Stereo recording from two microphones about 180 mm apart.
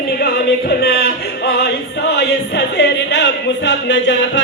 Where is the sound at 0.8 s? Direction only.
60° left (ahead or behind).